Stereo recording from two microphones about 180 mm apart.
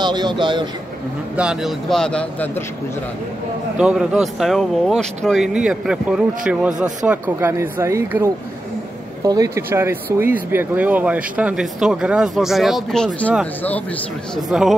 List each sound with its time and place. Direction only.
0.0 s a man's voice: 25° right (ahead or behind)
1.3 s speech: 5° right (ahead or behind)
3.7 s speech: 5° right (ahead or behind)
14.3 s speech: centre (ahead or behind)